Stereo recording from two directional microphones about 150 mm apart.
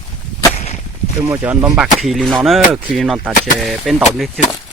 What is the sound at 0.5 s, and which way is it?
Whip, 45° left (ahead or behind).